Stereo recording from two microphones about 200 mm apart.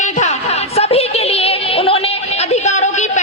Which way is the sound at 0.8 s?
30° left (ahead or behind).